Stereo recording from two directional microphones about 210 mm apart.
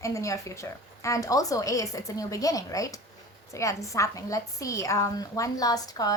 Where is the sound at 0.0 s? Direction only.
15° left (ahead or behind).